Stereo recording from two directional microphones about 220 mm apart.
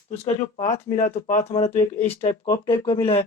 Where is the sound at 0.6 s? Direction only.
30° left (ahead or behind).